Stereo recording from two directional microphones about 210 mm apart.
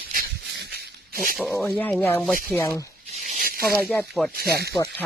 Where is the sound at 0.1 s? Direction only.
50° right (ahead or behind).